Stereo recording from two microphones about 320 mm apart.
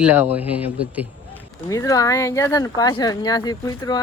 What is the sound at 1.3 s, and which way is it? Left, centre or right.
Speech, centre.